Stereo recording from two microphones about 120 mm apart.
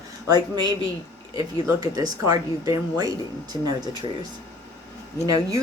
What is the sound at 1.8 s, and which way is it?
Speech, 30° right (ahead or behind).